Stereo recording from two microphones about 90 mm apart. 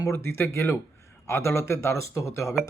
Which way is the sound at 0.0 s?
30° left (ahead or behind).